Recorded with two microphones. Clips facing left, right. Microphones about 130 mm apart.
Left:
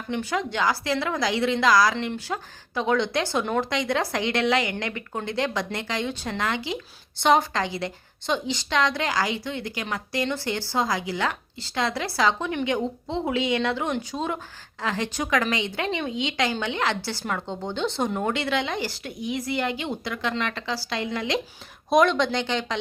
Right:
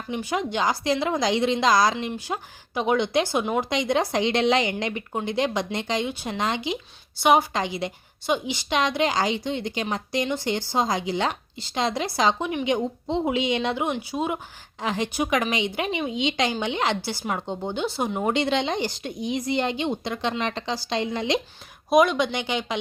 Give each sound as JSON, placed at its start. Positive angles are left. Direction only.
{"t": 0.1, "sound": "speech", "side_deg": -15}
{"t": 3.7, "sound": "a woman's voice", "side_deg": -20}
{"t": 18.3, "sound": "a woman's voice", "side_deg": -20}
{"t": 21.8, "sound": "speech", "side_deg": -5}